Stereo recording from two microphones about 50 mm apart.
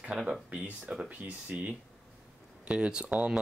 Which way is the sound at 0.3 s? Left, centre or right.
Centre.